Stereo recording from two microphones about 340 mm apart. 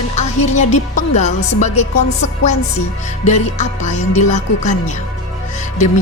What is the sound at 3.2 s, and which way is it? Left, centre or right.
A woman's voice, left.